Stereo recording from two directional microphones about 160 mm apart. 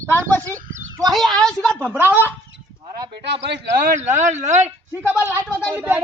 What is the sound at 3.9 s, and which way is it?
Speech, 50° right (ahead or behind).